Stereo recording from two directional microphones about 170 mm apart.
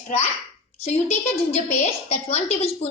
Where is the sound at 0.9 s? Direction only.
40° left (ahead or behind).